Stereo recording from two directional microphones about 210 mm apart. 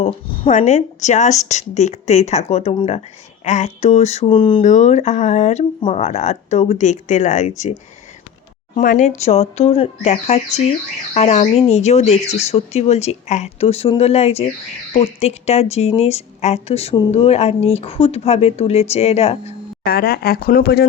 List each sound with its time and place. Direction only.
0.0 s speech: 25° left (ahead or behind)
0.5 s speech: 35° left (ahead or behind)
4.6 s speech: 35° left (ahead or behind)
8.7 s a woman's voice: 35° left (ahead or behind)
19.8 s speech: 45° left (ahead or behind)